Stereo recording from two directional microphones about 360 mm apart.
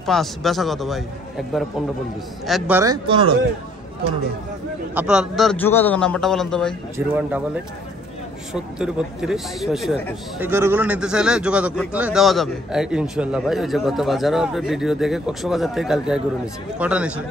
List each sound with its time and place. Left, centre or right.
0.0 s speech: centre
2.4 s speech: centre
4.9 s speech: centre
8.5 s speech: centre